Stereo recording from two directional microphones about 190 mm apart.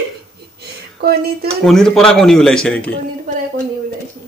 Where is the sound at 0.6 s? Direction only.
55° right (ahead or behind).